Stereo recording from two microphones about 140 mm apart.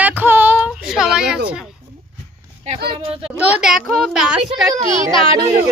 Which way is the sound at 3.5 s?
5° right (ahead or behind).